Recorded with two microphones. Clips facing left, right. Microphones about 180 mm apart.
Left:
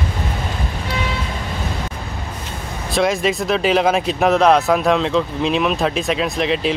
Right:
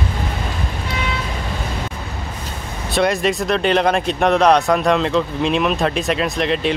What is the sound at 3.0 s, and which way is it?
Speech, centre (ahead or behind).